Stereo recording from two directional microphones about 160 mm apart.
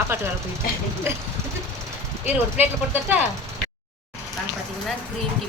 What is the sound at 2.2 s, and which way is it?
Speech, 10° right (ahead or behind).